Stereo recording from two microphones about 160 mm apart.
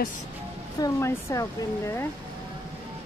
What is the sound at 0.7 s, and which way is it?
Speech, 20° left (ahead or behind).